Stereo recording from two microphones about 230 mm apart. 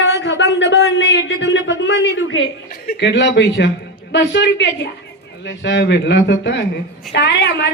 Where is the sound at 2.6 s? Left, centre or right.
Left.